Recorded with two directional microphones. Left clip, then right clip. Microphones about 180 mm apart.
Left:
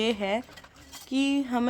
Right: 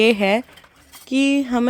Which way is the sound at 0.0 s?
40° right (ahead or behind).